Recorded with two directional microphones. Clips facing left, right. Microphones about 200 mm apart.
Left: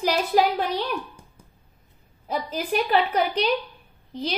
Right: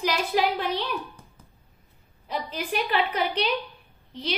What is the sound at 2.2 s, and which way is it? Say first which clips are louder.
A woman's voice: left 3 dB; 45° left (ahead or behind).